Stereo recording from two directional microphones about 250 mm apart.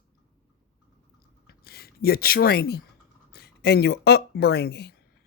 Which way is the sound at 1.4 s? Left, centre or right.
Left.